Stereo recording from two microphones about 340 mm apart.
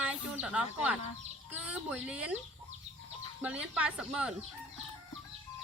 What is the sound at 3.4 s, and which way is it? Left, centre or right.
Speech, centre.